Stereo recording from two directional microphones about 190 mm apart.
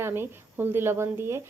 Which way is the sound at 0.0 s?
10° right (ahead or behind).